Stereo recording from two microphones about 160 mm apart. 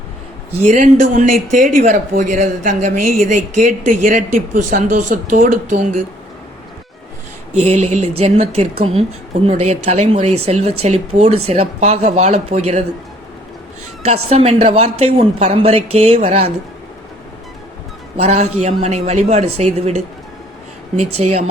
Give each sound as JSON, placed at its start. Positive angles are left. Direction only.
{"t": 0.6, "sound": "speech", "side_deg": -50}
{"t": 7.5, "sound": "speech", "side_deg": -40}
{"t": 14.0, "sound": "speech", "side_deg": -40}
{"t": 18.2, "sound": "speech", "side_deg": -45}
{"t": 21.2, "sound": "speech", "side_deg": -45}